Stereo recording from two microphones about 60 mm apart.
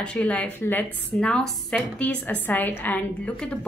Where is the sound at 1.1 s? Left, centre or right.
Centre.